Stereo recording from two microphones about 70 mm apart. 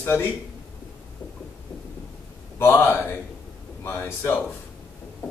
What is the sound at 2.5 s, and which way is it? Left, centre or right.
A man's voice, left.